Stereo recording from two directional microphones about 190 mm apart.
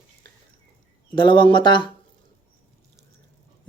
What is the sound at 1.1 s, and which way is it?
Speech, 25° left (ahead or behind).